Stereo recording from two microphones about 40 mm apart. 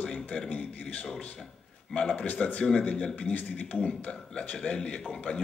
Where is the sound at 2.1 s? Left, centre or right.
Left.